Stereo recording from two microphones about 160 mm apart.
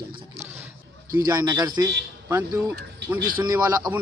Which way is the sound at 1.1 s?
20° right (ahead or behind).